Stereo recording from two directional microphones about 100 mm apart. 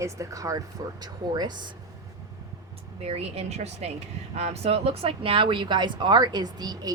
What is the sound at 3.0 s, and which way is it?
Speech, 90° right.